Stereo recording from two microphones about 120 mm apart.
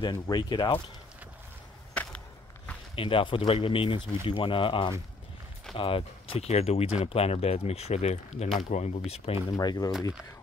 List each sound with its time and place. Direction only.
0.0 s speech: 40° left (ahead or behind)
2.0 s a sound: 10° left (ahead or behind)
3.0 s speech: 50° left (ahead or behind)
9.5 s speech: 30° left (ahead or behind)